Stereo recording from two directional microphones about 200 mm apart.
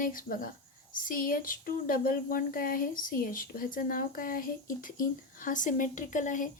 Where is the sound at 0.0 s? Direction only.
45° left (ahead or behind).